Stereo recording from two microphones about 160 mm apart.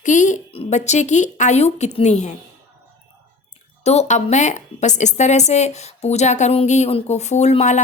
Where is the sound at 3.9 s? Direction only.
45° left (ahead or behind).